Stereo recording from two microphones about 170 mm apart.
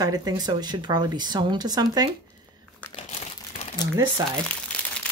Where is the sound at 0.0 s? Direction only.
20° right (ahead or behind).